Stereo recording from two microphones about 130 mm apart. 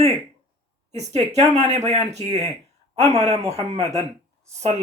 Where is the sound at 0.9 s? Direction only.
60° right (ahead or behind).